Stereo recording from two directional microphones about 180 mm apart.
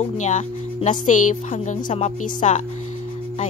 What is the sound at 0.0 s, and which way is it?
Speech, 40° left (ahead or behind).